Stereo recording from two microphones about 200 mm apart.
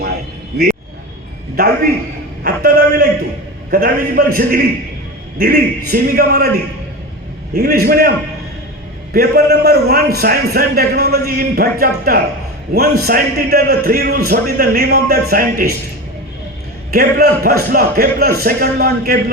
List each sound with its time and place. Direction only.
0.0 s vehicle: 50° right (ahead or behind)
1.5 s a man's voice: 50° right (ahead or behind)
7.5 s a man's voice: 50° right (ahead or behind)
9.1 s a man's voice: 50° right (ahead or behind)
16.9 s a man's voice: 50° right (ahead or behind)